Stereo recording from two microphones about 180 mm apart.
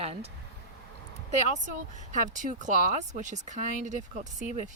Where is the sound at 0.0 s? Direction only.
35° right (ahead or behind).